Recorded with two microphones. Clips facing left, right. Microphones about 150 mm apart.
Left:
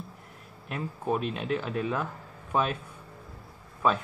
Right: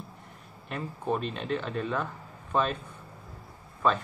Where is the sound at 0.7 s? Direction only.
5° left (ahead or behind).